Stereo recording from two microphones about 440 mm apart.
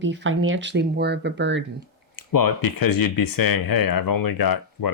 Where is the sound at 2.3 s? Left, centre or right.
Left.